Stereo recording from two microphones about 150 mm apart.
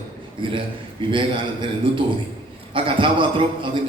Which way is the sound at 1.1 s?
35° right (ahead or behind).